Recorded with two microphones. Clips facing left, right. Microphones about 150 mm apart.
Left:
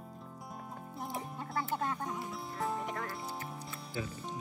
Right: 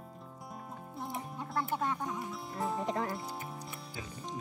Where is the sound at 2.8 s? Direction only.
25° right (ahead or behind).